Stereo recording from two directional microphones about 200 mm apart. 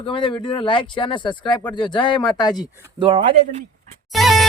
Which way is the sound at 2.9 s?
25° right (ahead or behind).